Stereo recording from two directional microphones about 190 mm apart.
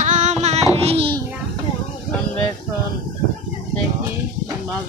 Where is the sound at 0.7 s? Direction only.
30° right (ahead or behind).